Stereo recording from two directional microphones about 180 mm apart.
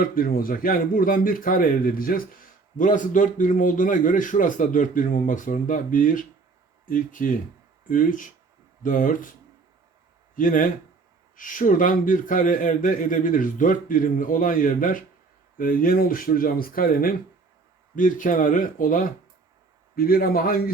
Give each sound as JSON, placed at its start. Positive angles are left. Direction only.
{"t": 0.0, "sound": "a man's voice", "side_deg": 55}
{"t": 10.3, "sound": "a man's voice", "side_deg": 45}